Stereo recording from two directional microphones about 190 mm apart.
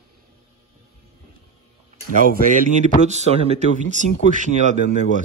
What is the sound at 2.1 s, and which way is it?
Speech, 45° right (ahead or behind).